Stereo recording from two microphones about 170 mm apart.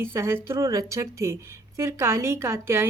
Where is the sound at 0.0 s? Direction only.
15° right (ahead or behind).